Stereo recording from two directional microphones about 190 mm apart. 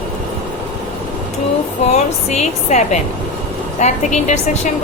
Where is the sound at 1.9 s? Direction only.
35° left (ahead or behind).